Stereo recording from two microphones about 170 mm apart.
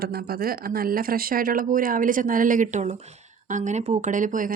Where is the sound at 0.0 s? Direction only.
65° right (ahead or behind).